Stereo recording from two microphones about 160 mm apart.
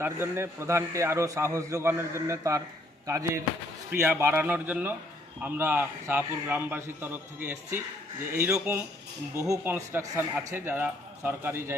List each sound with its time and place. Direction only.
0.0 s a man's voice: 15° right (ahead or behind)